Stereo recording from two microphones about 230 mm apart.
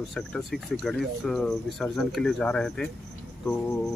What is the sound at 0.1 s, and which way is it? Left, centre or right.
Speech, centre.